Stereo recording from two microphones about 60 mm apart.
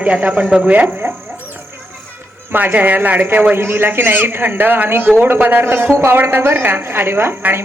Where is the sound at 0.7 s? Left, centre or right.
Right.